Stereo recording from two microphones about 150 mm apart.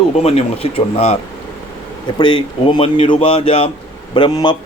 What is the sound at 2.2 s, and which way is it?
A man's voice, 30° left (ahead or behind).